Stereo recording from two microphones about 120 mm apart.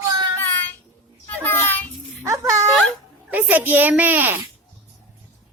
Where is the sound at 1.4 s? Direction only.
20° left (ahead or behind).